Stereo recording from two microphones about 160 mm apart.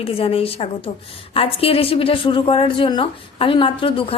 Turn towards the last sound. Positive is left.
turn(degrees=35)  # may be behind; listen again after turning